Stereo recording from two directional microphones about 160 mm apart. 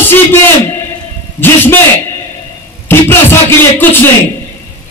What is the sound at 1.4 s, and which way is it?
Music, 15° left (ahead or behind).